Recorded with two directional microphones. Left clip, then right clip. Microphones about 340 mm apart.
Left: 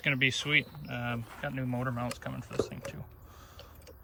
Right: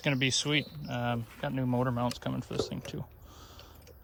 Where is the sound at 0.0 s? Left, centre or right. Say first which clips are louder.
Left 1 dB; centre.